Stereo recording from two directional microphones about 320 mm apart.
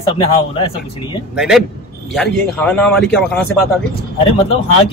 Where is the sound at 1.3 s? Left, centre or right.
Centre.